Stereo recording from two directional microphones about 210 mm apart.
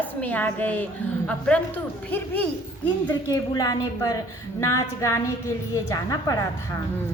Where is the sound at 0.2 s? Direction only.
5° left (ahead or behind).